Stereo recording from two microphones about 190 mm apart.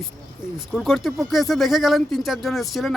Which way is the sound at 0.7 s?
Centre (ahead or behind).